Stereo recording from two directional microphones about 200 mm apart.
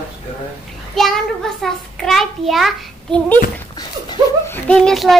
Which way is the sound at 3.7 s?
20° left (ahead or behind).